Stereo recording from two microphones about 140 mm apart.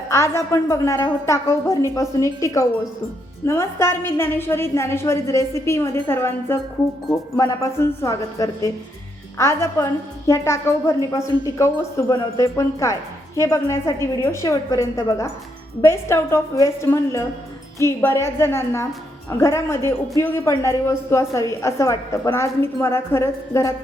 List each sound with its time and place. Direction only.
0.1 s speech: 20° left (ahead or behind)